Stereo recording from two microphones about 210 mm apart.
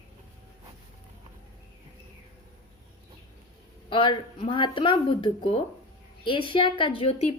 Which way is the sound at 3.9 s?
25° left (ahead or behind).